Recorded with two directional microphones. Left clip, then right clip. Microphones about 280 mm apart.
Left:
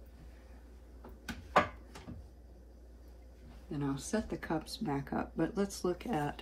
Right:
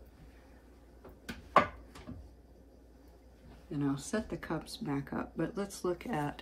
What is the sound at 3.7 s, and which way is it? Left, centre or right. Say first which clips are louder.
Speech: right 2 dB; centre.